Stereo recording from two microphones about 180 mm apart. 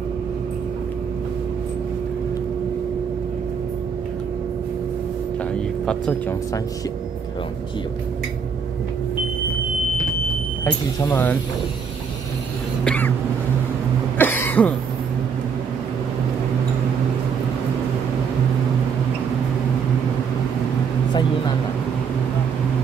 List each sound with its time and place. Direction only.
5.5 s music: 5° left (ahead or behind)
10.6 s speech: 15° left (ahead or behind)
12.8 s a sound: 10° left (ahead or behind)
14.1 s cough: 10° left (ahead or behind)